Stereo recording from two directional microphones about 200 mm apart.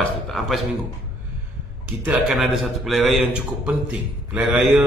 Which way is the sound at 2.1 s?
Centre (ahead or behind).